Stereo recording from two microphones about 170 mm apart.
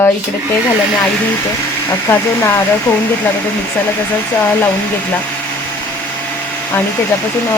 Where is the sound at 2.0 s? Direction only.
15° left (ahead or behind).